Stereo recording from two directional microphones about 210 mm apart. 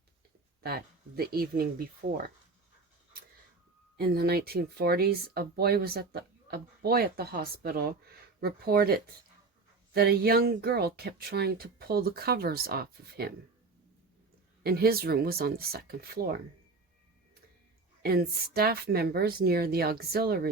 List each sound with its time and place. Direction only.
0.6 s speech: 45° right (ahead or behind)
3.9 s speech: 50° right (ahead or behind)
14.6 s speech: 45° right (ahead or behind)
18.0 s speech: 45° right (ahead or behind)